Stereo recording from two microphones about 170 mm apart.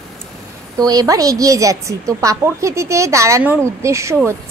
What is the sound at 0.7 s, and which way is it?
A woman's voice, 20° right (ahead or behind).